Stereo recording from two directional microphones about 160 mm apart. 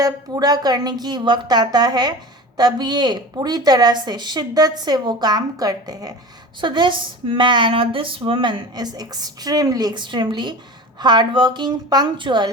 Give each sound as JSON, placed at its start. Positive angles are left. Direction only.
{"t": 0.0, "sound": "speech", "side_deg": -25}